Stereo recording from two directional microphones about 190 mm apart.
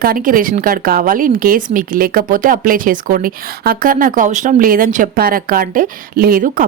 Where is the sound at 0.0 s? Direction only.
50° right (ahead or behind).